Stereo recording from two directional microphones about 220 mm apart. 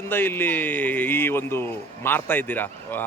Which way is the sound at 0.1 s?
10° left (ahead or behind).